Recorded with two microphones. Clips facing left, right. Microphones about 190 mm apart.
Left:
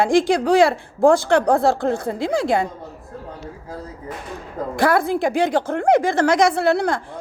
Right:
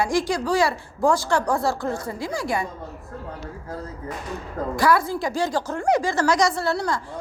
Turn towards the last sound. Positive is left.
turn(degrees=55)  # may be behind; listen again after turning